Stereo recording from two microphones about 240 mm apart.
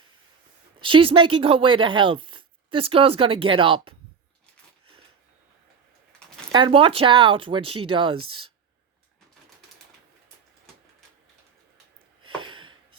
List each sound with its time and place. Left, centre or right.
0.8 s speech: right
6.5 s speech: centre
12.2 s a sound: right